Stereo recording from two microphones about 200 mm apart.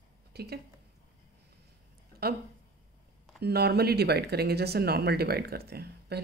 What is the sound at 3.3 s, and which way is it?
Speech, 55° right (ahead or behind).